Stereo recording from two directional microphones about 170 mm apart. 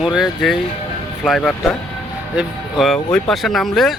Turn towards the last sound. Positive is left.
turn(degrees=0)  # may be behind; listen again after turning